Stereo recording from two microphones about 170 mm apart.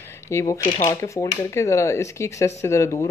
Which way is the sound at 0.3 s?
15° left (ahead or behind).